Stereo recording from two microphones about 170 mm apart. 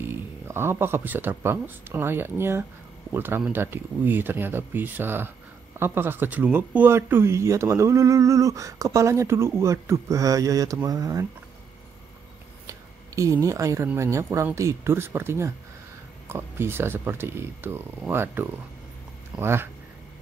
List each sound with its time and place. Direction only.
0.0 s speech: 15° right (ahead or behind)
12.6 s speech: 20° right (ahead or behind)